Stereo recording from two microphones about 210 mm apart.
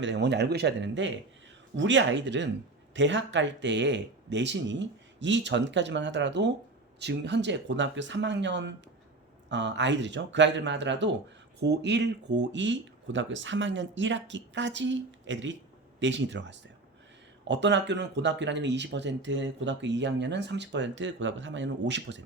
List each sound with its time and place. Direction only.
0.0 s speech: 55° right (ahead or behind)